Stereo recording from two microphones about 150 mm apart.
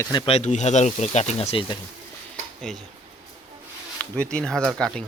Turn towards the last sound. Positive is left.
turn(degrees=5)  # may be behind; listen again after turning